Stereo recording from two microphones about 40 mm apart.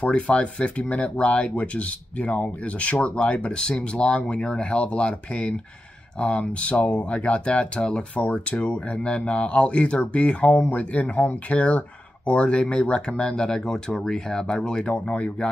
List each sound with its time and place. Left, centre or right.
0.0 s speech: left
8.2 s speech: left
8.5 s speech: left